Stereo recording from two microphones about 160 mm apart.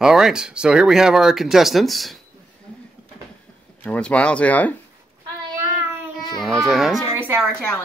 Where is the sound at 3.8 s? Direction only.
10° left (ahead or behind).